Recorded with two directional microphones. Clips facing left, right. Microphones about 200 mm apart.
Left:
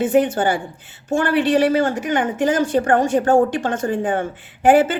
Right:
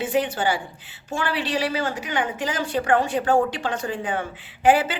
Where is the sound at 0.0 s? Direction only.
50° left (ahead or behind).